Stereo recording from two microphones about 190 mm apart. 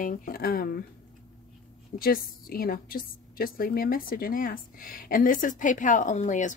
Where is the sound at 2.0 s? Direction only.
50° left (ahead or behind).